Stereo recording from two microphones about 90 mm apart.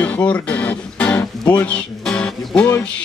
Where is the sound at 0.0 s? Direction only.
15° left (ahead or behind).